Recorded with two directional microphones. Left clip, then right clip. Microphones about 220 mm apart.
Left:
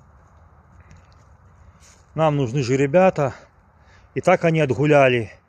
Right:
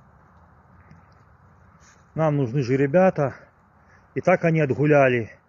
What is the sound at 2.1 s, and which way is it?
A man's voice, 15° left (ahead or behind).